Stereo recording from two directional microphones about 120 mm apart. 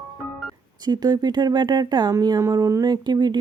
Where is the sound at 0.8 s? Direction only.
35° right (ahead or behind).